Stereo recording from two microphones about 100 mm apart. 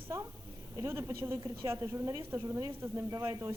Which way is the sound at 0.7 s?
25° right (ahead or behind).